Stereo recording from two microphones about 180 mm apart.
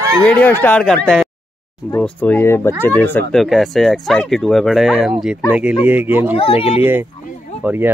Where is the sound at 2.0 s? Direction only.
10° left (ahead or behind).